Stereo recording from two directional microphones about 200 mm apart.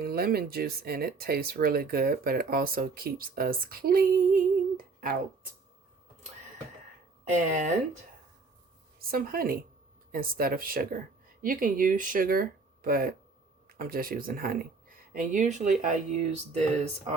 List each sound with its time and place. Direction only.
0.0 s speech: 50° right (ahead or behind)
9.0 s a woman's voice: 50° right (ahead or behind)